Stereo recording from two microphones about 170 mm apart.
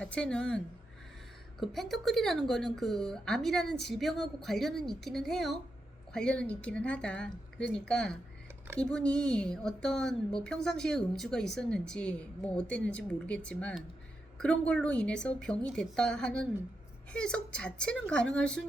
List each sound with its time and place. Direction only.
0.0 s a woman's voice: 5° left (ahead or behind)